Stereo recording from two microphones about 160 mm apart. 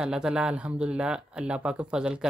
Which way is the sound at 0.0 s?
5° right (ahead or behind).